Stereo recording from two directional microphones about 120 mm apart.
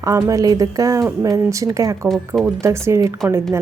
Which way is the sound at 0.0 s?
25° right (ahead or behind).